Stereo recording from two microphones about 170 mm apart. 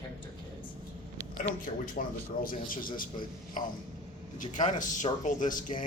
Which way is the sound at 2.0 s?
50° left (ahead or behind).